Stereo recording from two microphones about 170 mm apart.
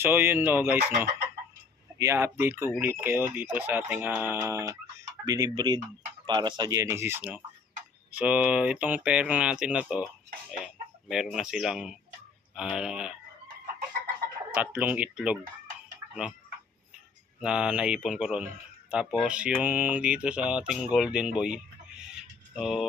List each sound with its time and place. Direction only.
0.0 s speech: 15° right (ahead or behind)
2.0 s speech: 15° right (ahead or behind)
11.1 s speech: 5° right (ahead or behind)
14.5 s speech: 10° right (ahead or behind)
17.4 s speech: 5° right (ahead or behind)
21.3 s a sound: 5° right (ahead or behind)